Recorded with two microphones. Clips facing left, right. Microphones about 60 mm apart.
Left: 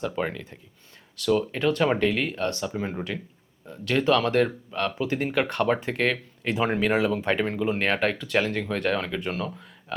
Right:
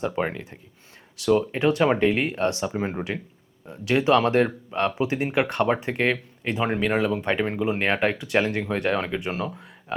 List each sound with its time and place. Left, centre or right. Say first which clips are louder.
0.0 s speech: right 2 dB; right
3.7 s speech: right 2 dB; centre
5.0 s speech: right 2 dB; centre
6.5 s speech: even; centre